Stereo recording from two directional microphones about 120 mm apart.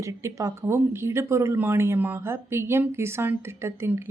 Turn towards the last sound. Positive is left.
turn(degrees=-20)  # may be behind; listen again after turning